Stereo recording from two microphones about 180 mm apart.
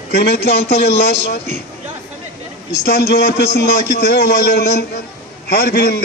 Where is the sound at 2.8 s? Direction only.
60° left (ahead or behind).